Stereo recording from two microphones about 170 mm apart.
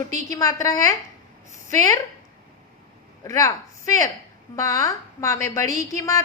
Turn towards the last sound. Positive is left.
turn(degrees=20)  # may be behind; listen again after turning